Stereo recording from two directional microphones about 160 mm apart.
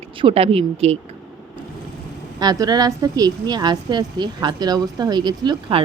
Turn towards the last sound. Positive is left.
turn(degrees=-30)  # may be behind; listen again after turning